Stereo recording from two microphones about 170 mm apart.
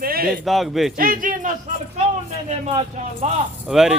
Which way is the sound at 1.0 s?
55° right (ahead or behind).